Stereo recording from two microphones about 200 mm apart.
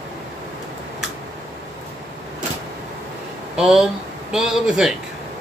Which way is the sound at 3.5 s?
Centre (ahead or behind).